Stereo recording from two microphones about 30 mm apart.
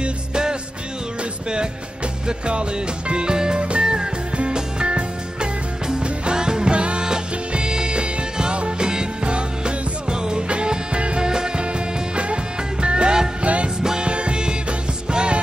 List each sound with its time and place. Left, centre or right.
0.0 s music: right
2.2 s music: right
6.7 s music: right
7.5 s music: right
11.2 s music: right
12.8 s music: right